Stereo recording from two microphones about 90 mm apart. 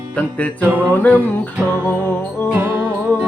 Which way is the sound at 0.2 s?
15° left (ahead or behind).